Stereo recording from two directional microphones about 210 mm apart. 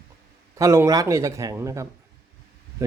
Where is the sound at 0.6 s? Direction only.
15° right (ahead or behind).